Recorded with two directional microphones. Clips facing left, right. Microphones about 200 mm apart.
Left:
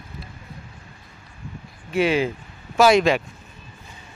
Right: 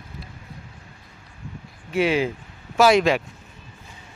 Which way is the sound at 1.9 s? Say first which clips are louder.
Left 1 dB; 5° right (ahead or behind).